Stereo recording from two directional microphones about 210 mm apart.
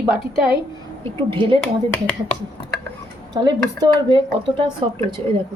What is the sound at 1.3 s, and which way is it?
Speech, 25° right (ahead or behind).